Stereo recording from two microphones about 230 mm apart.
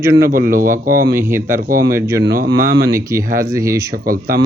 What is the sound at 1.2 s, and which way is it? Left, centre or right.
Speech, centre.